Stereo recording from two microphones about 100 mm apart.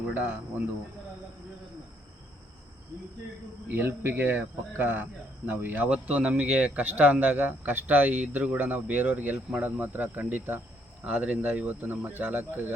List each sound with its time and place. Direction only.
0.1 s speech: 15° right (ahead or behind)
3.7 s speech: 20° right (ahead or behind)